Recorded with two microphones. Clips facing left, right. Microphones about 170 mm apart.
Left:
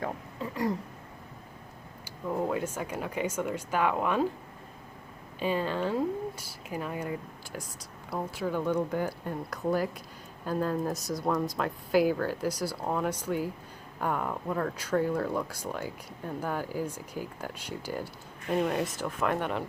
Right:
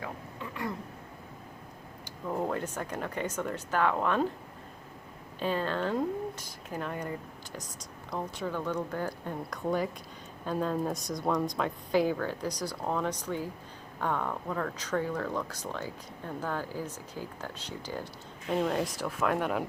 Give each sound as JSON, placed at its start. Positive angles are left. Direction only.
{"t": 0.5, "sound": "speech", "side_deg": 35}
{"t": 2.0, "sound": "speech", "side_deg": 5}
{"t": 5.4, "sound": "speech", "side_deg": 10}